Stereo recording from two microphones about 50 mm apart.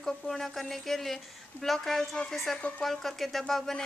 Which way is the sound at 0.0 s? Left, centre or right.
Centre.